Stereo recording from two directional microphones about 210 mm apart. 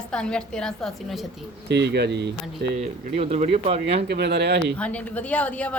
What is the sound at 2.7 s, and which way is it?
Speech, 30° right (ahead or behind).